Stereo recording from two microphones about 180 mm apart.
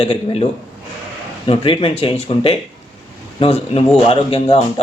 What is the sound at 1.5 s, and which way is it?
Speech, 30° left (ahead or behind).